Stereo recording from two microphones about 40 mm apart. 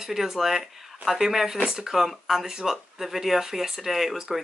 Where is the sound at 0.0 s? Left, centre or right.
Centre.